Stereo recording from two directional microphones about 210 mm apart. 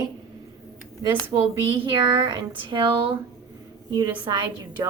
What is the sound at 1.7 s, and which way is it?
Speech, 20° right (ahead or behind).